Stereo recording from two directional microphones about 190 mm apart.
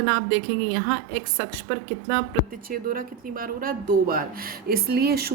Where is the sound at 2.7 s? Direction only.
50° right (ahead or behind).